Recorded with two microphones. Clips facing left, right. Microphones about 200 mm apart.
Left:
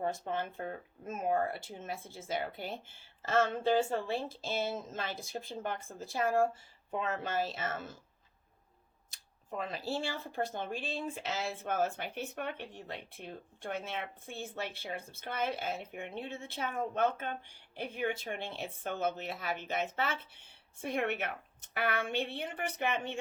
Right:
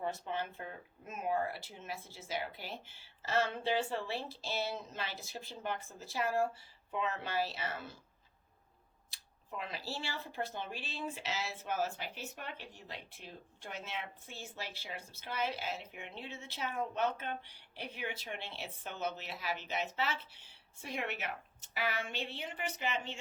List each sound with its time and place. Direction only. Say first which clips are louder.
0.0 s speech: left 3 dB; 50° left (ahead or behind)
9.6 s speech: left 6 dB; 50° left (ahead or behind)